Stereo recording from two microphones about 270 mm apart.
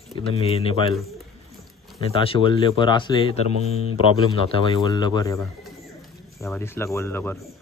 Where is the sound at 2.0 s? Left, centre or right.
Centre.